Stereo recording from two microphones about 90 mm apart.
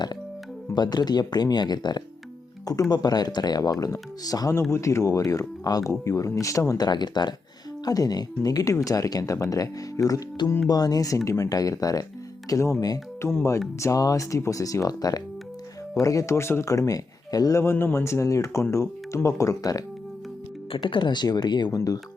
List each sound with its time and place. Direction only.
0.7 s speech: 50° left (ahead or behind); by 6.7 s 35° left (ahead or behind)
6.7 s speech: 50° left (ahead or behind)
17.6 s speech: 25° left (ahead or behind)
20.7 s speech: 65° left (ahead or behind)
21.8 s speech: 40° left (ahead or behind)